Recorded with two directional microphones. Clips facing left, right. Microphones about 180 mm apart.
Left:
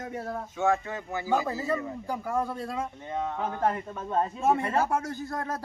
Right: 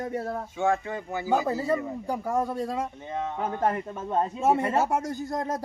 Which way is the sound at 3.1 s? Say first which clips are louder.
Left 1 dB; 5° right (ahead or behind).